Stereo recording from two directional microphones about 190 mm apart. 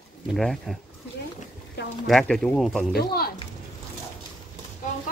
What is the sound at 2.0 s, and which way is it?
Speech, centre (ahead or behind).